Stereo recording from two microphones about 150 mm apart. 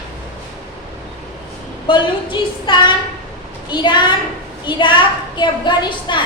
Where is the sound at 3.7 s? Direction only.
30° left (ahead or behind).